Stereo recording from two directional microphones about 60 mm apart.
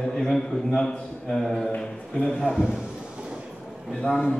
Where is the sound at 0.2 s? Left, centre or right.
Centre.